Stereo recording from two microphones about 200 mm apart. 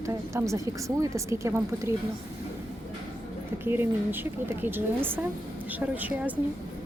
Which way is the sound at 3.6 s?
10° right (ahead or behind).